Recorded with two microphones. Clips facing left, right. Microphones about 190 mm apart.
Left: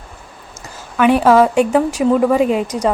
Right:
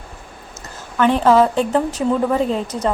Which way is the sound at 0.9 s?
10° left (ahead or behind).